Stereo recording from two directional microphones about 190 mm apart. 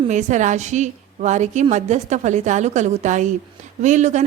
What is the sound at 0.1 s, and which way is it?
Speech, 40° right (ahead or behind).